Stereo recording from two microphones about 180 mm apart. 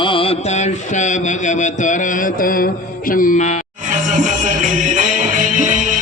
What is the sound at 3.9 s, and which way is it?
Music, 45° right (ahead or behind).